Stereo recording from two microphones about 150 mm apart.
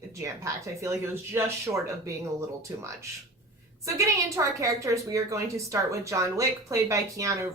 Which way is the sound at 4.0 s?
20° right (ahead or behind).